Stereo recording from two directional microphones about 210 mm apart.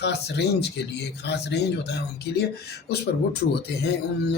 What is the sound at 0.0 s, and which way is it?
Speech, 55° left (ahead or behind).